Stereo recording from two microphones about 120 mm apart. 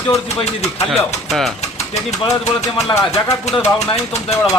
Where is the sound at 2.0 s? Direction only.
70° left (ahead or behind).